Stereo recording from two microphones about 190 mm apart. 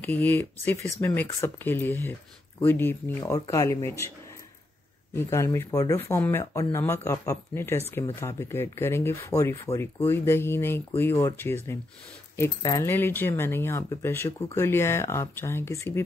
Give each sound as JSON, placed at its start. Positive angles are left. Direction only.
{"t": 0.0, "sound": "speech", "side_deg": 10}
{"t": 5.1, "sound": "speech", "side_deg": 15}
{"t": 6.4, "sound": "speech", "side_deg": 25}
{"t": 6.7, "sound": "speech", "side_deg": 15}